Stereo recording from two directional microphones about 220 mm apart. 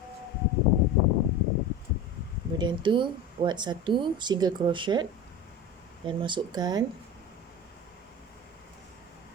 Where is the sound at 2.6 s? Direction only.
20° right (ahead or behind).